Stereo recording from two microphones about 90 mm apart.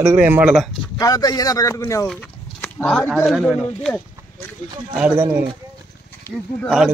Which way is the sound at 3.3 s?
5° right (ahead or behind).